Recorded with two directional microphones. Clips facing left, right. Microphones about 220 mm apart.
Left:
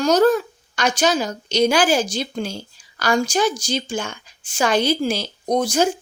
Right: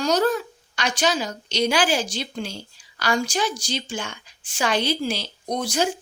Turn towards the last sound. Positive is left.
turn(degrees=45)  # may be behind; listen again after turning